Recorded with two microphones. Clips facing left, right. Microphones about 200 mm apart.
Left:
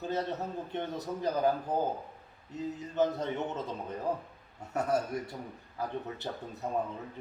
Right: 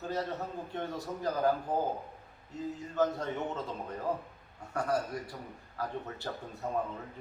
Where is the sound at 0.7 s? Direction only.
20° left (ahead or behind).